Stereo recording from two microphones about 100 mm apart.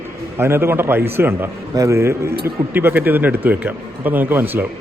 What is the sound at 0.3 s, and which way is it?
A man's voice, 25° right (ahead or behind).